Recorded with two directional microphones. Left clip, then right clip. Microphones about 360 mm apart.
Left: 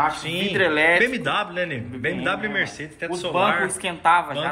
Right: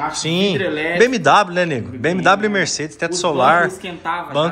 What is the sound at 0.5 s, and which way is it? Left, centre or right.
Speech, centre.